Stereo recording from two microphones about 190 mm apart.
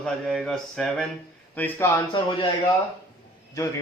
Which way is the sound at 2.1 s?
25° left (ahead or behind).